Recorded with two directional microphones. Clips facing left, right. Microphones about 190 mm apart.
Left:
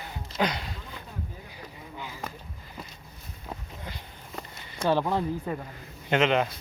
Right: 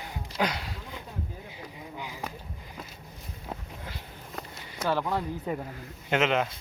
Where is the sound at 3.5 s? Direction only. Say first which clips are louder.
Even; 5° right (ahead or behind).